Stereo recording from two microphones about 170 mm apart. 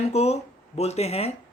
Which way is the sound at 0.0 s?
40° left (ahead or behind).